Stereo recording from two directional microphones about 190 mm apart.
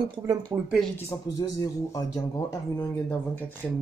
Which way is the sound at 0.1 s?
20° right (ahead or behind).